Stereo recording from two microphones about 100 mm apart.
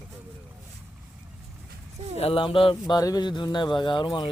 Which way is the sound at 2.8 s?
40° left (ahead or behind).